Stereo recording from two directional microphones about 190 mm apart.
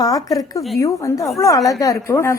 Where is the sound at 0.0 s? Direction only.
20° left (ahead or behind).